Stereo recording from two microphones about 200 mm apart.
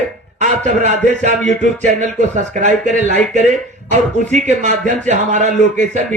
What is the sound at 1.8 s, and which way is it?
Speech, 35° right (ahead or behind).